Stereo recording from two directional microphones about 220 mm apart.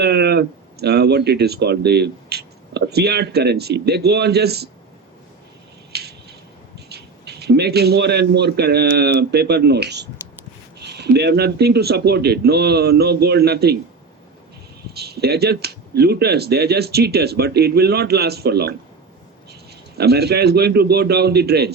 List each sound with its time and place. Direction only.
0.0 s speech: 50° right (ahead or behind)
5.9 s a sound: 50° right (ahead or behind)
6.7 s a man's voice: 50° right (ahead or behind)
14.9 s speech: 45° right (ahead or behind)
20.0 s speech: 45° right (ahead or behind)